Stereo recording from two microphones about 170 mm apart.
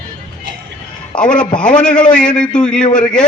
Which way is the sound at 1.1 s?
25° left (ahead or behind).